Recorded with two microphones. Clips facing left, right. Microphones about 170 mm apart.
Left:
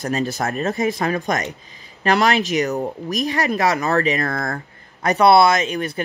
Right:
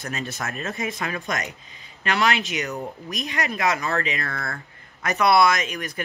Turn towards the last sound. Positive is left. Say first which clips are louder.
# left 7 dB
turn(degrees=30)  # may be behind; listen again after turning